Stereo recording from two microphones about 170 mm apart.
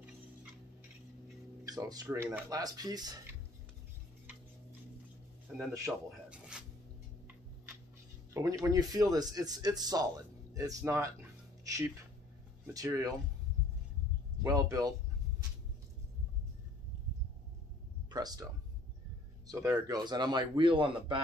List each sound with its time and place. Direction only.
1.6 s speech: 20° right (ahead or behind)
5.9 s a sound: 5° right (ahead or behind)
8.3 s speech: 20° right (ahead or behind)
14.4 s speech: 20° right (ahead or behind)
18.1 s a man's voice: 20° right (ahead or behind)